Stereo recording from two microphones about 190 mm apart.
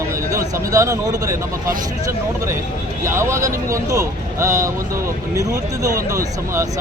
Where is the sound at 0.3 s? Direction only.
15° right (ahead or behind).